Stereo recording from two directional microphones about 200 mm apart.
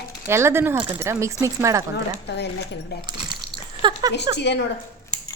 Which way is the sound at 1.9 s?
55° left (ahead or behind).